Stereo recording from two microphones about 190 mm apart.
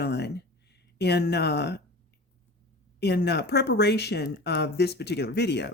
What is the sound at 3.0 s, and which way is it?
Speech, 60° left (ahead or behind).